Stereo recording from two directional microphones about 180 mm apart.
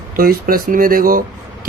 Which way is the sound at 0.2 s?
55° right (ahead or behind).